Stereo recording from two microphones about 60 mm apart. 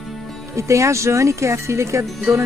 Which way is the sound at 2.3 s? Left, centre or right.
Right.